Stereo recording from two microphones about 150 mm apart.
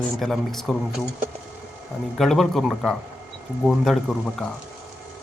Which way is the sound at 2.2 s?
Centre (ahead or behind).